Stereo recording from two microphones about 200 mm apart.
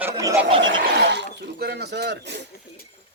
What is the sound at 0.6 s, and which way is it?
Speech, 60° right (ahead or behind).